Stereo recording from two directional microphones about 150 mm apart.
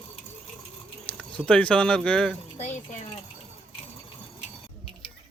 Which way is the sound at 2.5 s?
50° left (ahead or behind).